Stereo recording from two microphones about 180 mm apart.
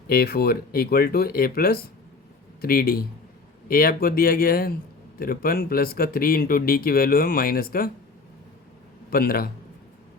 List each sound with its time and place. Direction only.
0.1 s speech: 60° left (ahead or behind)
9.0 s a man's voice: 55° left (ahead or behind)